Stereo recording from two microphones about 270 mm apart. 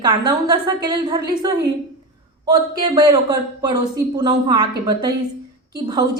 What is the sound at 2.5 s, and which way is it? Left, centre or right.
A woman's voice, centre.